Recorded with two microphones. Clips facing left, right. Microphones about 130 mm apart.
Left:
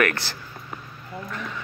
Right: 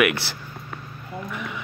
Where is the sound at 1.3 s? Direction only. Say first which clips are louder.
Even; 15° right (ahead or behind).